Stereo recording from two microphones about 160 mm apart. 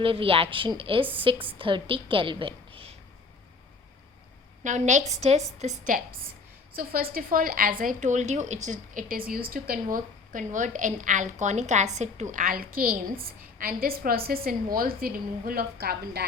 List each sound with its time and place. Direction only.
0.0 s a woman's voice: 35° right (ahead or behind)
4.6 s a woman's voice: 50° right (ahead or behind)
6.7 s a woman's voice: 65° right (ahead or behind)